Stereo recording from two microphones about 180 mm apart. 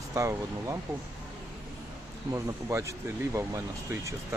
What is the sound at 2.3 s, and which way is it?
Speech, 15° right (ahead or behind).